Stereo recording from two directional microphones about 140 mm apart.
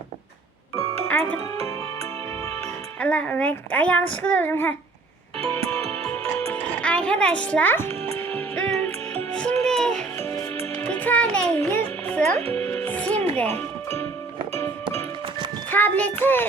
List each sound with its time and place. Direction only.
1.0 s music: 10° left (ahead or behind)
3.0 s a woman's voice: 10° left (ahead or behind)
6.1 s music: 10° left (ahead or behind)
15.7 s a woman's voice: 10° left (ahead or behind)